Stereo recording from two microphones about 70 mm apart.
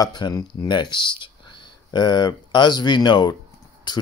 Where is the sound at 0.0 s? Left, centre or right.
Left.